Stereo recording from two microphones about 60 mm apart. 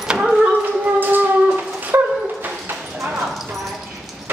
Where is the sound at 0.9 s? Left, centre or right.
Right.